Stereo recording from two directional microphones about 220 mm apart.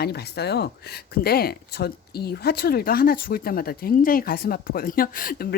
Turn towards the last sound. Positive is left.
turn(degrees=40)  # may be behind; listen again after turning